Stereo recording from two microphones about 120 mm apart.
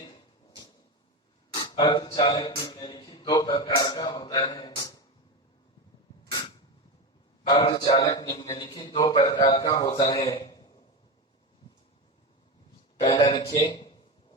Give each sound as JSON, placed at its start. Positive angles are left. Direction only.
{"t": 1.5, "sound": "speech", "side_deg": 35}
{"t": 7.7, "sound": "a man's voice", "side_deg": 30}
{"t": 13.0, "sound": "a man's voice", "side_deg": 40}